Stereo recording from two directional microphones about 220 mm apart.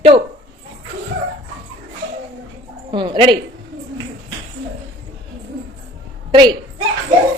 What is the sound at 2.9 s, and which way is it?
Speech, 20° right (ahead or behind).